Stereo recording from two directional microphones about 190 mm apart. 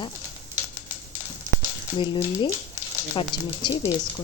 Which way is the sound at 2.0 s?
25° left (ahead or behind).